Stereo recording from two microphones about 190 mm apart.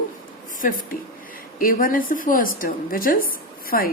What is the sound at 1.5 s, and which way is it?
A woman's voice, 45° left (ahead or behind).